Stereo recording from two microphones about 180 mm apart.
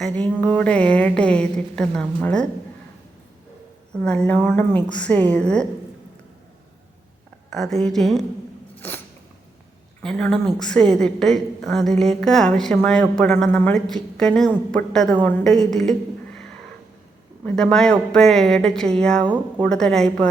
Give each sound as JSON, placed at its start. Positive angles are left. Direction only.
{"t": 0.0, "sound": "a woman's voice", "side_deg": 5}
{"t": 3.9, "sound": "a woman's voice", "side_deg": 5}
{"t": 7.5, "sound": "a woman's voice", "side_deg": 0}
{"t": 8.7, "sound": "a sound", "side_deg": 10}
{"t": 10.0, "sound": "a woman's voice", "side_deg": 5}
{"t": 17.4, "sound": "a woman's voice", "side_deg": 5}
{"t": 19.2, "sound": "speech", "side_deg": -25}
{"t": 19.6, "sound": "a woman's voice", "side_deg": 5}